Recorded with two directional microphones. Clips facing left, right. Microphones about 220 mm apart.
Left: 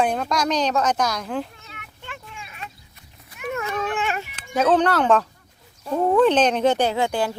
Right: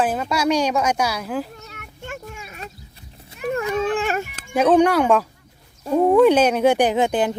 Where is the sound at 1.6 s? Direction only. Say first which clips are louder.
Right 6 dB; 45° right (ahead or behind).